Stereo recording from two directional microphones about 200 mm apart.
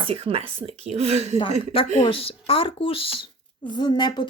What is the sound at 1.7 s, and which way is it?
Speech, 30° left (ahead or behind).